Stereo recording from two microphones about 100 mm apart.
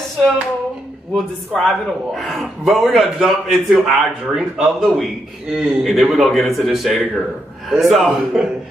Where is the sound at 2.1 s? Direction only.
Centre (ahead or behind).